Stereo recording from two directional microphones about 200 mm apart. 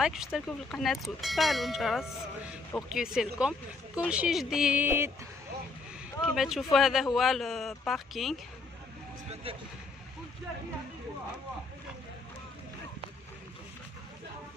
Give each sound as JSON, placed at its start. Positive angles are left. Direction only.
{"t": 0.0, "sound": "speech", "side_deg": 0}
{"t": 6.2, "sound": "speech", "side_deg": 0}
{"t": 9.3, "sound": "speech", "side_deg": -30}